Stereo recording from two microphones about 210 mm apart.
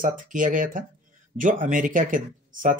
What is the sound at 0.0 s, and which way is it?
Speech, 40° right (ahead or behind).